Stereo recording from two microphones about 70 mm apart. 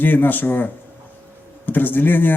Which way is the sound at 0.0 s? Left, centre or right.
Left.